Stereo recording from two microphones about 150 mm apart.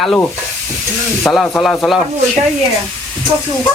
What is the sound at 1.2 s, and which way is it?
Speech, 10° left (ahead or behind).